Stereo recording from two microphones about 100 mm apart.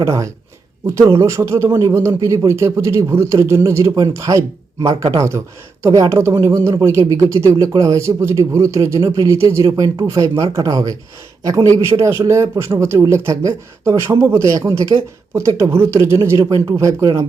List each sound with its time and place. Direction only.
0.0 s speech: 30° right (ahead or behind)